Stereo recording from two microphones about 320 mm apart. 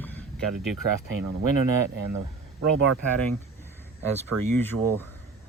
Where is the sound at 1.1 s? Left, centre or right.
Right.